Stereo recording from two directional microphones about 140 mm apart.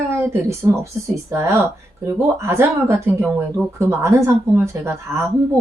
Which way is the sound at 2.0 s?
20° right (ahead or behind).